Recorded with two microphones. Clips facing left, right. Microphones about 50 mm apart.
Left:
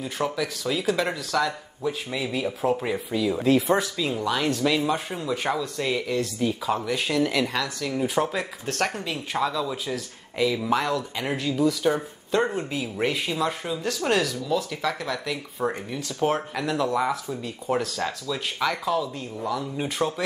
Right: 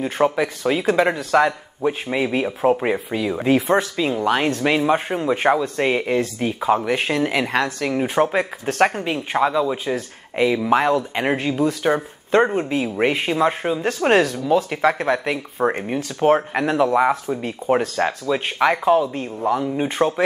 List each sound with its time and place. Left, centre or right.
0.0 s speech: right